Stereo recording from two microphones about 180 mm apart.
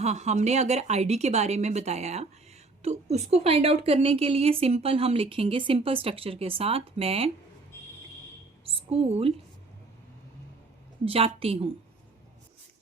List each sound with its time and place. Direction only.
0.0 s a woman's voice: 40° right (ahead or behind)
8.6 s a woman's voice: 30° right (ahead or behind)
11.0 s a woman's voice: 30° right (ahead or behind)